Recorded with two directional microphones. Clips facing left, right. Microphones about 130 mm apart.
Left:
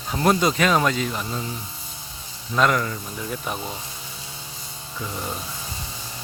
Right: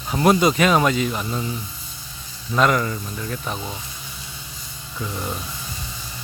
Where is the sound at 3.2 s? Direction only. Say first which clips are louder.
Left 2 dB; 15° left (ahead or behind).